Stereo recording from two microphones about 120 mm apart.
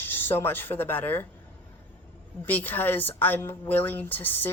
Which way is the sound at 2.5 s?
15° left (ahead or behind).